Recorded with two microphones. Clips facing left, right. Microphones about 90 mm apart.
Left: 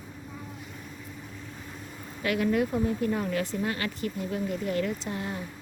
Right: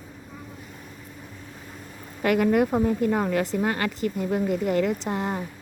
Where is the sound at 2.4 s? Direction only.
65° right (ahead or behind).